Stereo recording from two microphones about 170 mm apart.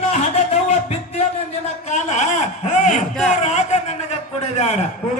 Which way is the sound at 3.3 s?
40° left (ahead or behind).